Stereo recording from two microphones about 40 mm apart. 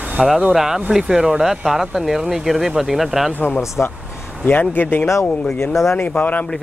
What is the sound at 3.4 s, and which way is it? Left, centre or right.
Speech, left.